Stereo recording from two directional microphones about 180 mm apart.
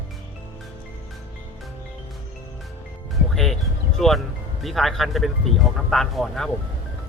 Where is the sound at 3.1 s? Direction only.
Centre (ahead or behind).